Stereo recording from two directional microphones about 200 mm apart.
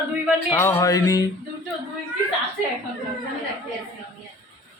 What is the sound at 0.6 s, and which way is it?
Speech, 15° left (ahead or behind).